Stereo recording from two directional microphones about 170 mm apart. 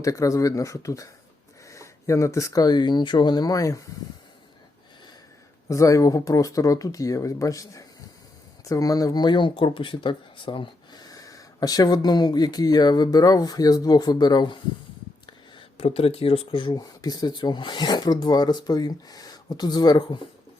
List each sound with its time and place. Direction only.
0.0 s speech: 20° left (ahead or behind)
5.6 s speech: 20° left (ahead or behind)